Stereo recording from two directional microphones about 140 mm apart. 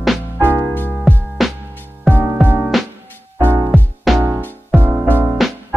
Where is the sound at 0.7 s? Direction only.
15° left (ahead or behind).